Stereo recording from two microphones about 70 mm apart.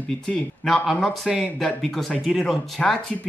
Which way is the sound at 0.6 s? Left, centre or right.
Centre.